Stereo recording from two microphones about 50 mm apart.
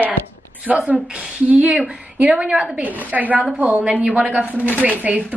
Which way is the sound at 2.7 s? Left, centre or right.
Right.